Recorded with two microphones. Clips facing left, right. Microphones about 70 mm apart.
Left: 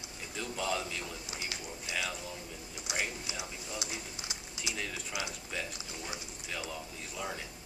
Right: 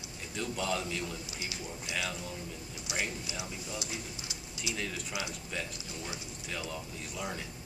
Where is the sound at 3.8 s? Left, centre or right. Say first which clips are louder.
Right 1 dB; left.